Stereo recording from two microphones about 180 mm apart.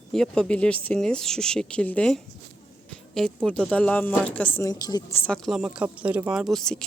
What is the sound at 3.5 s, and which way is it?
Speech, 5° left (ahead or behind).